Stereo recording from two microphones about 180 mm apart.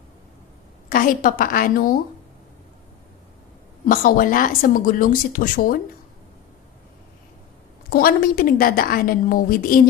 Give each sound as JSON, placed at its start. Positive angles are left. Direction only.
{"t": 0.8, "sound": "a woman's voice", "side_deg": 50}
{"t": 3.8, "sound": "speech", "side_deg": 50}
{"t": 7.9, "sound": "speech", "side_deg": 55}